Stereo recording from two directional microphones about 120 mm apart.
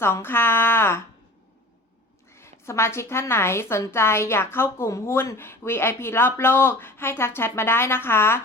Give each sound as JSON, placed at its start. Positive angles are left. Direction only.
{"t": 0.0, "sound": "a woman's voice", "side_deg": 20}
{"t": 2.3, "sound": "a woman's voice", "side_deg": 20}